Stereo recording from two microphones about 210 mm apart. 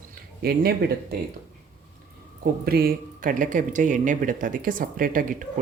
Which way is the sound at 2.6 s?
50° right (ahead or behind).